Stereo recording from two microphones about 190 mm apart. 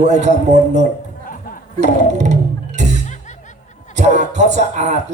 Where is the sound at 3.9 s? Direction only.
40° right (ahead or behind).